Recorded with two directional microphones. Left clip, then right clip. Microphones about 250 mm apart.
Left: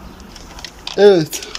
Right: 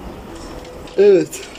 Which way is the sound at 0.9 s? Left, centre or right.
Left.